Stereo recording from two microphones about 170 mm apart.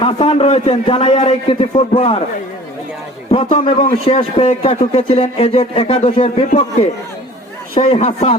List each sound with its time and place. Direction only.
0.0 s speech: 35° left (ahead or behind)
3.3 s speech: 35° left (ahead or behind)